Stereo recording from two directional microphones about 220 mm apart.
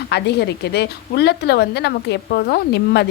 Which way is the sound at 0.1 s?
50° left (ahead or behind).